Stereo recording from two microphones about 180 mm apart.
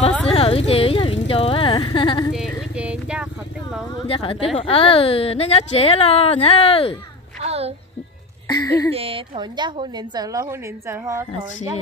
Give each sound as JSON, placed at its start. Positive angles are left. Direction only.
{"t": 0.3, "sound": "vehicle", "side_deg": 35}
{"t": 2.3, "sound": "vehicle", "side_deg": -5}
{"t": 3.9, "sound": "speech", "side_deg": 30}
{"t": 7.3, "sound": "music", "side_deg": -35}
{"t": 8.5, "sound": "speech", "side_deg": 20}
{"t": 8.9, "sound": "a woman's voice", "side_deg": -30}